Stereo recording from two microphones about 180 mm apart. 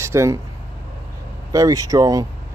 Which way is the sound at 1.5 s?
20° right (ahead or behind).